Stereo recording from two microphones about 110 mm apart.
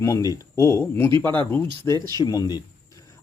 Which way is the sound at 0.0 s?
30° left (ahead or behind).